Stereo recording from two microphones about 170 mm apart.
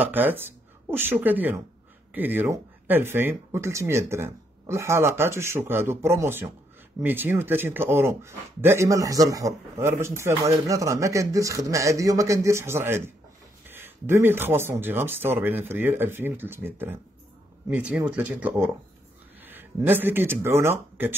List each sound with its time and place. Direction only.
0.0 s speech: 10° right (ahead or behind)